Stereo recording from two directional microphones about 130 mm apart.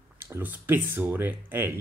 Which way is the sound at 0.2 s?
15° right (ahead or behind).